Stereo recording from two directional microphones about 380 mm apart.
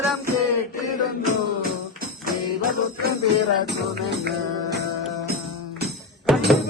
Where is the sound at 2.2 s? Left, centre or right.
Right.